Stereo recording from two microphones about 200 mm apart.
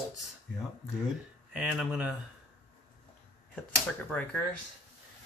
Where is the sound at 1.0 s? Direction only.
Centre (ahead or behind).